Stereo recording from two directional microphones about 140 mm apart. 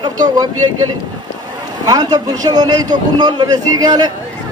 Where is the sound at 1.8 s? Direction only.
30° right (ahead or behind).